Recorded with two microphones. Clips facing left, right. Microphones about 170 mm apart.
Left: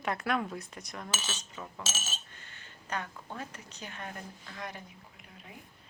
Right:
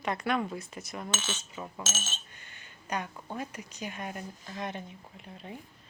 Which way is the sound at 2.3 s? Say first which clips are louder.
Even; 15° right (ahead or behind).